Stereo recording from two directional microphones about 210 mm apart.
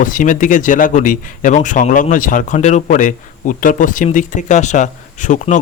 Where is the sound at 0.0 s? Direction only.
40° left (ahead or behind).